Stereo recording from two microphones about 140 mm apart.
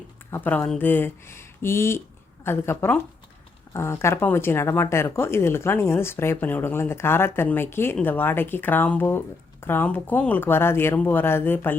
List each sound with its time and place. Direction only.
0.3 s speech: 15° left (ahead or behind)